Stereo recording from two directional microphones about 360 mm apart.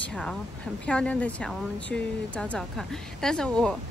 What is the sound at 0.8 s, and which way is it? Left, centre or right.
Speech, centre.